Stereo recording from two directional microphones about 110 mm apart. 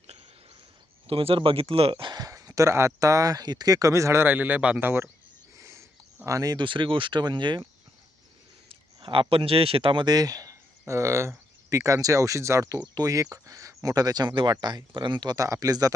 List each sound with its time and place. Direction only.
1.0 s speech: 60° right (ahead or behind); by 5.1 s 20° right (ahead or behind)
5.5 s a sound: 25° right (ahead or behind)
6.2 s speech: 35° right (ahead or behind)
8.7 s speech: 50° right (ahead or behind); by 15.9 s 35° right (ahead or behind)